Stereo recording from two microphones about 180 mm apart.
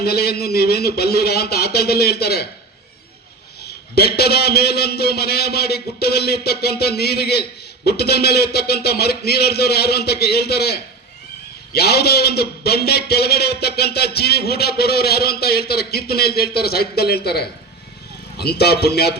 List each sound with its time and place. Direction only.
0.0 s a man's voice: 60° left (ahead or behind)
3.6 s a man's voice: 60° left (ahead or behind)